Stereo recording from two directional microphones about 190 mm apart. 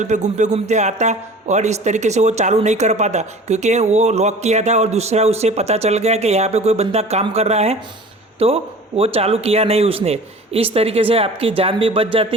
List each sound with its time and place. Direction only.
0.0 s a man's voice: 40° right (ahead or behind)